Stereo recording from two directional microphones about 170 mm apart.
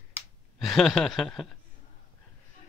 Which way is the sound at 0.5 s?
Centre (ahead or behind).